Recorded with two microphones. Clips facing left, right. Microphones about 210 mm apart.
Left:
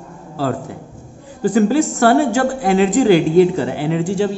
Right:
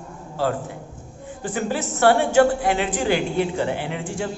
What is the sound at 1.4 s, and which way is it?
A woman's voice, 40° left (ahead or behind).